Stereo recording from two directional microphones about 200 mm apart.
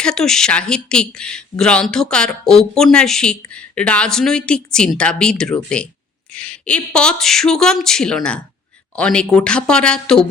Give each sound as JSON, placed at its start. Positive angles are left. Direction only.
{"t": 0.0, "sound": "speech", "side_deg": 5}